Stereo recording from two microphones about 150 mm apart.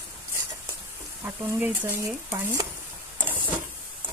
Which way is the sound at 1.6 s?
10° right (ahead or behind).